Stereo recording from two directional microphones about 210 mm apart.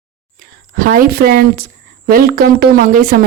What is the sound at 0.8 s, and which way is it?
A woman's voice, 40° right (ahead or behind).